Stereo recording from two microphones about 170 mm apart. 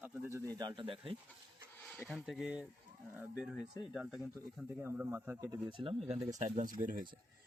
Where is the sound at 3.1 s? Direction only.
15° right (ahead or behind).